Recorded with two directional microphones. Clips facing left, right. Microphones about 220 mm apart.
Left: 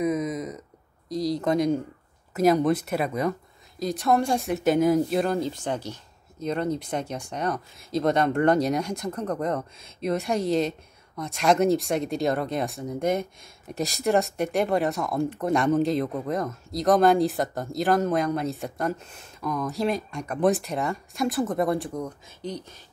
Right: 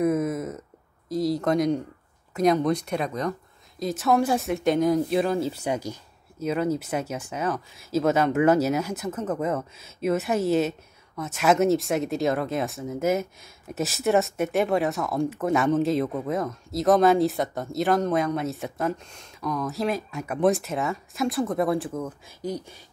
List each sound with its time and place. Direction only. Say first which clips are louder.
0.0 s a sound: right 2 dB; 5° right (ahead or behind)
1.0 s speech: right 1 dB; centre (ahead or behind)
3.8 s speech: right 1 dB; centre (ahead or behind)